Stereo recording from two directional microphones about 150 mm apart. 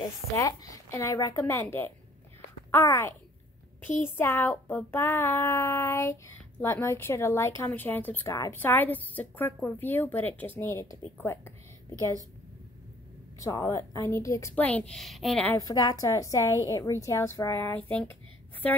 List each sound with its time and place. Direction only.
0.0 s a woman's voice: 25° left (ahead or behind)
1.4 s child singing: 15° left (ahead or behind)
2.7 s a woman's voice: 20° left (ahead or behind)
4.2 s child singing: 15° left (ahead or behind)
11.9 s a woman's voice: 20° right (ahead or behind)
13.4 s a woman's voice: 20° left (ahead or behind)
14.5 s a woman's voice: 10° left (ahead or behind)
15.4 s a woman's voice: 25° left (ahead or behind)